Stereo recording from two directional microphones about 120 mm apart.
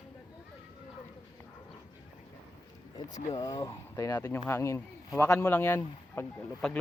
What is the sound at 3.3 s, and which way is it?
Speech, 30° left (ahead or behind).